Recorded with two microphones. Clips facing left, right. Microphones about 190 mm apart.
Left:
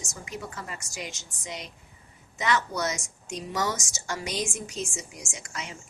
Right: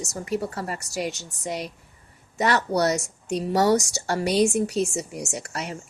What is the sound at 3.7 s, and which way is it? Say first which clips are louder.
A woman's voice: right 11 dB; 65° right (ahead or behind).